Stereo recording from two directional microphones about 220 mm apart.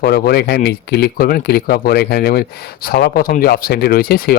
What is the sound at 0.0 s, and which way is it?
Speech, 45° left (ahead or behind).